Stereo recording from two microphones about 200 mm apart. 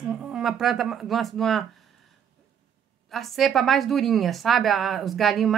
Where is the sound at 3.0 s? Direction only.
Centre (ahead or behind).